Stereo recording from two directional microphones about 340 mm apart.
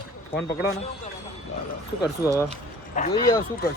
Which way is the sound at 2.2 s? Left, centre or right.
Centre.